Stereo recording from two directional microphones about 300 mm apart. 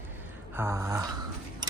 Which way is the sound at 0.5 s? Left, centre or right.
Centre.